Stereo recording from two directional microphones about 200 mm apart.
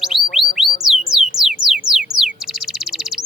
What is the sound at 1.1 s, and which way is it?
Music, centre (ahead or behind).